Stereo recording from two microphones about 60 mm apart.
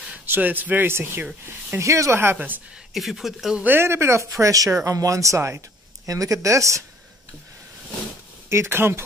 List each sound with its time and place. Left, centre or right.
0.3 s speech: right
1.8 s speech: right
2.3 s speech: right
2.9 s speech: centre
3.6 s speech: right
4.4 s speech: right
6.0 s speech: right
8.5 s speech: right